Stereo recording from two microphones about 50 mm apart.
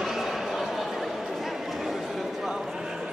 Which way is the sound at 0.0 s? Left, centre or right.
Centre.